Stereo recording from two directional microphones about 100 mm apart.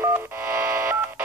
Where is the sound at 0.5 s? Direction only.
25° right (ahead or behind).